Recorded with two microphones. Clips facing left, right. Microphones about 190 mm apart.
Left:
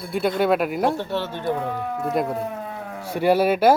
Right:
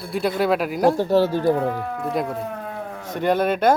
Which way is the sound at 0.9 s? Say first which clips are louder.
Right 8 dB; 40° right (ahead or behind).